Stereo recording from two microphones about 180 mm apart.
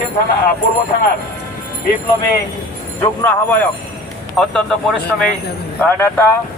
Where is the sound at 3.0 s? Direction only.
10° left (ahead or behind).